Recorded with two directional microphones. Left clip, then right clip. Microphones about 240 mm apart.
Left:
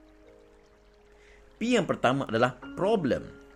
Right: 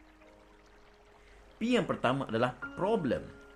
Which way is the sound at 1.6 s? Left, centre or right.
Left.